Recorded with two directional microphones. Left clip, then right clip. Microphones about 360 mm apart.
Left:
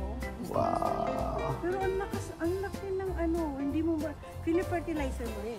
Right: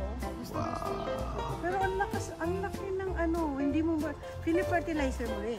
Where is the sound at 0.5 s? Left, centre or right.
Centre.